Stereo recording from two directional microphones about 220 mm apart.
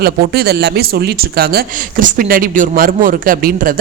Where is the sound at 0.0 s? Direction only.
45° right (ahead or behind).